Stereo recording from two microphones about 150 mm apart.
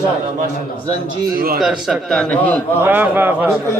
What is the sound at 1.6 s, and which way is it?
Speech, centre (ahead or behind).